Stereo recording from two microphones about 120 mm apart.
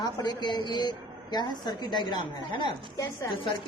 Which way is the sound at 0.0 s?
35° left (ahead or behind).